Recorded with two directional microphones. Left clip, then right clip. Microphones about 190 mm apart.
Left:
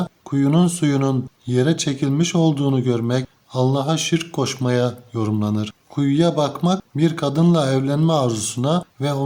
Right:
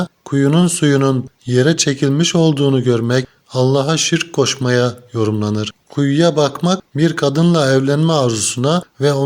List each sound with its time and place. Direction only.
0.0 s speech: 20° right (ahead or behind)